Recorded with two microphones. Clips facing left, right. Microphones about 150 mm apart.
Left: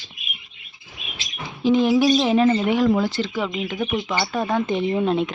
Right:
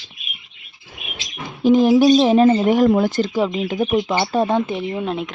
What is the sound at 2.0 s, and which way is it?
Speech, 35° right (ahead or behind).